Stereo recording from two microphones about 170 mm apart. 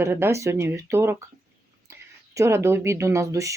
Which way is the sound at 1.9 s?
15° right (ahead or behind).